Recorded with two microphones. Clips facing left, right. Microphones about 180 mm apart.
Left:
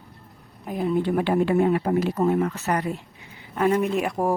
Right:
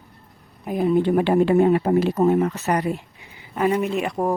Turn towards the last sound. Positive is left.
turn(degrees=5)  # may be behind; listen again after turning